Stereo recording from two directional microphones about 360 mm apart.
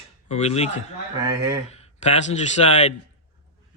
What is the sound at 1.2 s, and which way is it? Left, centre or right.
Speech, centre.